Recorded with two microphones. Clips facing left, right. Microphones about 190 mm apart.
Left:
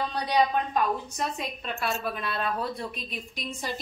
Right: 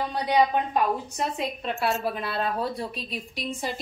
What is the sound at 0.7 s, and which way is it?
A woman's voice, 25° right (ahead or behind).